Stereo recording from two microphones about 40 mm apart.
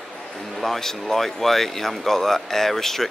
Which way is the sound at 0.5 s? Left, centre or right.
Centre.